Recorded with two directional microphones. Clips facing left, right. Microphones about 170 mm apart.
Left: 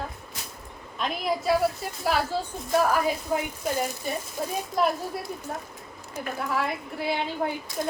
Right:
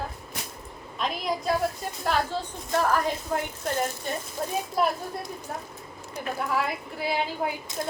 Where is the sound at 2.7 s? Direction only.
10° left (ahead or behind).